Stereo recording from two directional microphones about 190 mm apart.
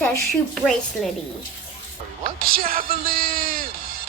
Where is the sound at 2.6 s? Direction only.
50° right (ahead or behind).